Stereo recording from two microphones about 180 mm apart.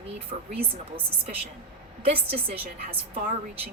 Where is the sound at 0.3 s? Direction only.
35° right (ahead or behind).